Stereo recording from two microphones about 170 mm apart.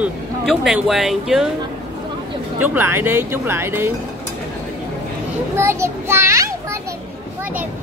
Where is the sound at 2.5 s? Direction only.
10° right (ahead or behind).